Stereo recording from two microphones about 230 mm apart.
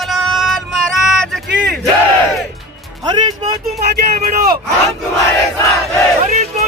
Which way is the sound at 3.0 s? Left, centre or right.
Centre.